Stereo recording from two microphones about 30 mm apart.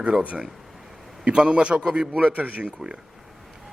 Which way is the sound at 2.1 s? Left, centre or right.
Right.